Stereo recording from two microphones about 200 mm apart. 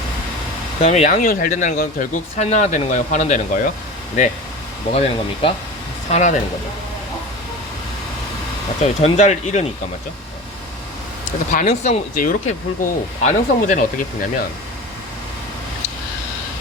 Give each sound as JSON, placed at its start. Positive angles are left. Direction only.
{"t": 0.8, "sound": "speech", "side_deg": 35}
{"t": 4.9, "sound": "speech", "side_deg": 30}
{"t": 8.8, "sound": "speech", "side_deg": 30}
{"t": 11.5, "sound": "speech", "side_deg": 35}